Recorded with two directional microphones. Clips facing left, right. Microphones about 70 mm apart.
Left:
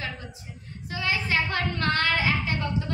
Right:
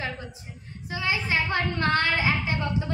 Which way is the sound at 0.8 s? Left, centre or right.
Centre.